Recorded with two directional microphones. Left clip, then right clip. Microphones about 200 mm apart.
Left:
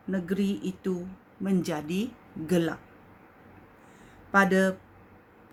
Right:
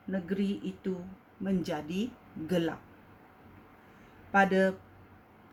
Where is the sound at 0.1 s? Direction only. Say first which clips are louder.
Left 4 dB; 35° left (ahead or behind).